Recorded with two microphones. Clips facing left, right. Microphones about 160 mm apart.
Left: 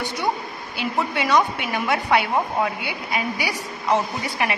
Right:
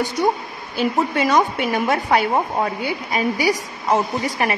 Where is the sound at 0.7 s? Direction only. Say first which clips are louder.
Right 5 dB; 45° right (ahead or behind).